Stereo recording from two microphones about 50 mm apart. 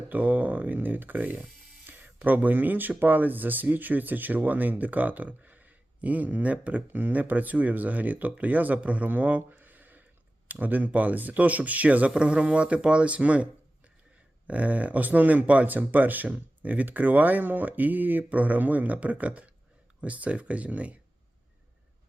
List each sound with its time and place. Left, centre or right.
0.1 s speech: right